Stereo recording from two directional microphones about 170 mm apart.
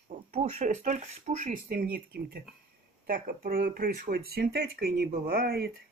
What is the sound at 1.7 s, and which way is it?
Speech, 60° right (ahead or behind).